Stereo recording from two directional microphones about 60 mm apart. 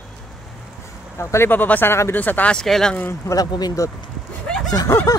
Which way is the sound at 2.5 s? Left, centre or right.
Centre.